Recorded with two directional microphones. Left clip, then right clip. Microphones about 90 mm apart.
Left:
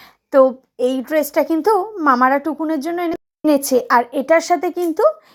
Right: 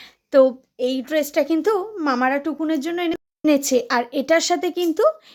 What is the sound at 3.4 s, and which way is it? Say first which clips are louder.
Speech: left 3 dB; 15° left (ahead or behind).